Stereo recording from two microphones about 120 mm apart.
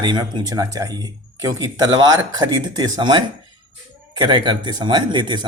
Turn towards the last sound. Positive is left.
turn(degrees=-40)  # may be behind; listen again after turning